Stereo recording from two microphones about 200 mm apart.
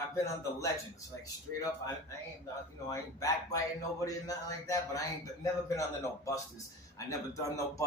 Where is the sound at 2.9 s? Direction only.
15° left (ahead or behind).